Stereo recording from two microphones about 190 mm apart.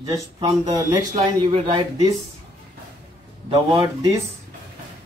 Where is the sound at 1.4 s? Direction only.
25° right (ahead or behind).